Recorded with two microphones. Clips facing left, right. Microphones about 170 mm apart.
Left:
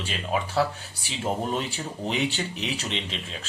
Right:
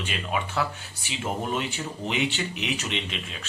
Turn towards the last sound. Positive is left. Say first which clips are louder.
# even
turn(degrees=35)  # may be behind; listen again after turning